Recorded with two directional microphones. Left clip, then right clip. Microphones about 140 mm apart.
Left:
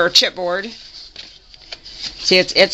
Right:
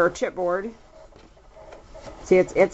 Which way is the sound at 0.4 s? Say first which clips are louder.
Left 4 dB; 45° left (ahead or behind).